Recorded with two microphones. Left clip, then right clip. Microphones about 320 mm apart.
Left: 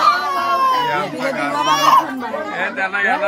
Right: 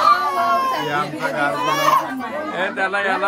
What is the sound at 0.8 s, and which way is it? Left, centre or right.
A man's voice, centre.